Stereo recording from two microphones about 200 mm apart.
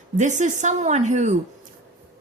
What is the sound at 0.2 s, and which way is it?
A woman's voice, 35° right (ahead or behind).